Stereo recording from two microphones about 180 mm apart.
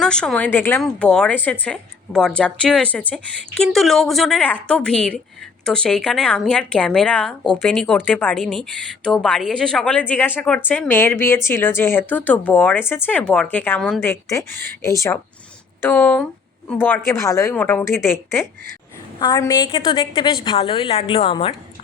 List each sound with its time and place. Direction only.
0.0 s a woman's voice: 5° left (ahead or behind)
14.0 s a woman's voice: 15° left (ahead or behind); by 21.5 s 30° left (ahead or behind)